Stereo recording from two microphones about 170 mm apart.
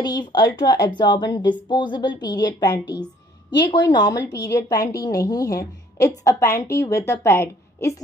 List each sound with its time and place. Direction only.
0.0 s a woman's voice: 25° left (ahead or behind)